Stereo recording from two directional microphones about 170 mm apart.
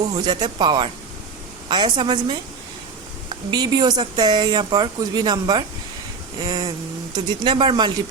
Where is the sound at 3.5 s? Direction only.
25° right (ahead or behind).